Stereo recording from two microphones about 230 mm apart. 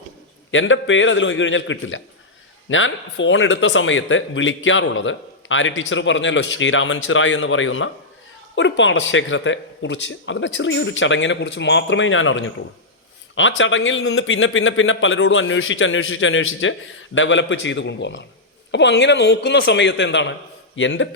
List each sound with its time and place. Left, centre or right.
0.5 s speech: left